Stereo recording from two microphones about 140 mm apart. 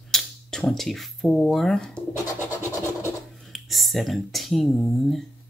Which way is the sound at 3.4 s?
Centre (ahead or behind).